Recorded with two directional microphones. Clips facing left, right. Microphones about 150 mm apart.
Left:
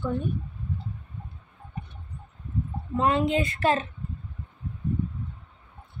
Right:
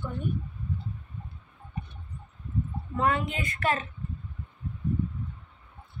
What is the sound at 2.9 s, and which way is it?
Speech, 25° left (ahead or behind).